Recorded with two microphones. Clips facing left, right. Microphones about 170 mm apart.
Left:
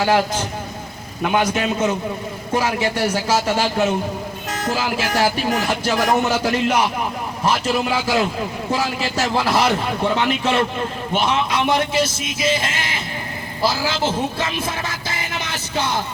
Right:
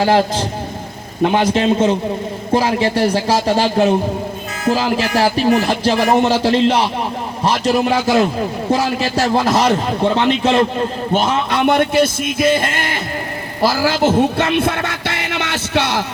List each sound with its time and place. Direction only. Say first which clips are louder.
0.0 s speech: right 4 dB; 35° right (ahead or behind)
5.1 s speech: right 6 dB; 40° right (ahead or behind)
11.1 s a man's voice: right 2 dB; 45° right (ahead or behind)
13.6 s music: right 6 dB; 60° right (ahead or behind); by 16.0 s 80° right